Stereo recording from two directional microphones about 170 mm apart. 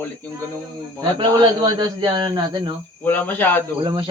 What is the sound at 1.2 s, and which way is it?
A man's voice, 25° right (ahead or behind).